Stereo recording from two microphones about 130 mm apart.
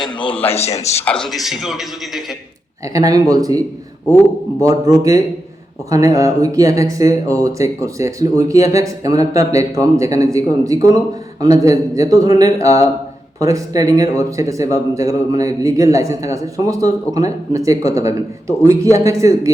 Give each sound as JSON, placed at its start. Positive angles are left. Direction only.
{"t": 0.4, "sound": "a man's voice", "side_deg": 55}
{"t": 1.0, "sound": "a man's voice", "side_deg": 5}
{"t": 2.8, "sound": "speech", "side_deg": -25}
{"t": 4.6, "sound": "speech", "side_deg": -25}